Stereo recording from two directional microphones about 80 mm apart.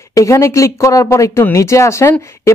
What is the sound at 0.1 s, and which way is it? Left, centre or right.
Speech, left.